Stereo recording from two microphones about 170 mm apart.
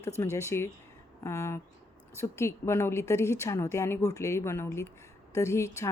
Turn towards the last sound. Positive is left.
turn(degrees=15)  # may be behind; listen again after turning